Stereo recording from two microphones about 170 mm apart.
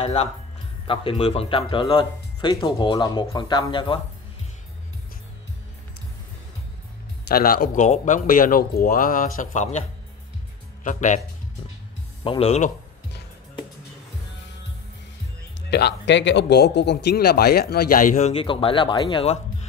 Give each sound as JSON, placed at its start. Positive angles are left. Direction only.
{"t": 0.0, "sound": "speech", "side_deg": 40}
{"t": 7.2, "sound": "speech", "side_deg": 60}
{"t": 7.8, "sound": "speech", "side_deg": 45}
{"t": 12.2, "sound": "speech", "side_deg": 35}
{"t": 15.7, "sound": "speech", "side_deg": 80}
{"t": 18.3, "sound": "speech", "side_deg": 30}